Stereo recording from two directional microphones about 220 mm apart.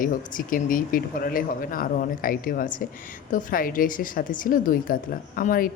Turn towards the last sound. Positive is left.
turn(degrees=40)  # may be behind; listen again after turning